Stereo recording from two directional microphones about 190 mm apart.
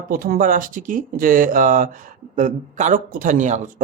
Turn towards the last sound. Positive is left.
turn(degrees=-40)  # may be behind; listen again after turning